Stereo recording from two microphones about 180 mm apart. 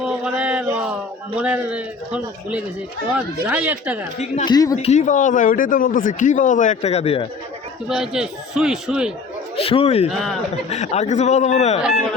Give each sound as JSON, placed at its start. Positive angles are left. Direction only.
{"t": 0.0, "sound": "a man's voice", "side_deg": -5}
{"t": 4.4, "sound": "speech", "side_deg": 20}
{"t": 4.8, "sound": "speech", "side_deg": 40}
{"t": 7.9, "sound": "a man's voice", "side_deg": -5}
{"t": 9.6, "sound": "speech", "side_deg": 30}
{"t": 10.1, "sound": "a man's voice", "side_deg": 0}
{"t": 10.7, "sound": "speech", "side_deg": 35}